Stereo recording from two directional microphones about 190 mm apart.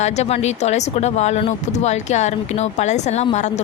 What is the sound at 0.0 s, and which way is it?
Speech, 35° left (ahead or behind).